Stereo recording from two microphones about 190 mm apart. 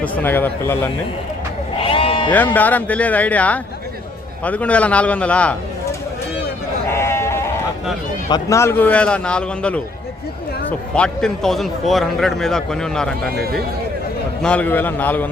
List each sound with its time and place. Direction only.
0.2 s a man's voice: 10° left (ahead or behind)
1.8 s sheep: 30° left (ahead or behind)
2.3 s a man's voice: 10° left (ahead or behind)
6.9 s sheep: 15° left (ahead or behind)
8.3 s a man's voice: 15° left (ahead or behind)
13.3 s speech: 55° right (ahead or behind)
14.4 s a man's voice: 5° left (ahead or behind)